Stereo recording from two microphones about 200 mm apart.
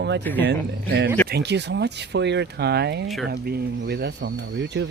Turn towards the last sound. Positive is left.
turn(degrees=-60)  # may be behind; listen again after turning